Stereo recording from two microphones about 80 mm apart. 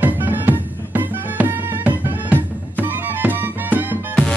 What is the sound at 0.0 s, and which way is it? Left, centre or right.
Music, right.